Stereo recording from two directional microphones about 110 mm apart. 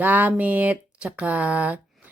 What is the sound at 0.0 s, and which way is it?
Speech, 15° right (ahead or behind).